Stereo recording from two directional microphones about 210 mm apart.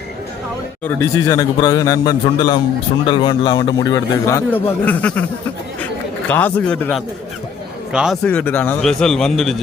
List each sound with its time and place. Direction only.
0.9 s a man's voice: 15° left (ahead or behind)